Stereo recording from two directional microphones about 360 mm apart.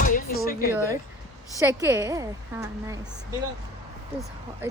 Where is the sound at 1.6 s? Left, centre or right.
Centre.